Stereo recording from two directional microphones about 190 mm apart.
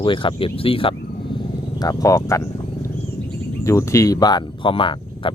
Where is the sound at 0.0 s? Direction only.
25° left (ahead or behind).